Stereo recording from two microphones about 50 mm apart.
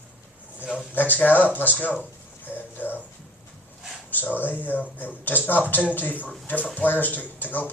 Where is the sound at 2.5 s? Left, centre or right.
Left.